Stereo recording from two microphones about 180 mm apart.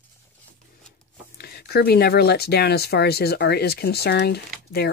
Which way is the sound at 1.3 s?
60° left (ahead or behind).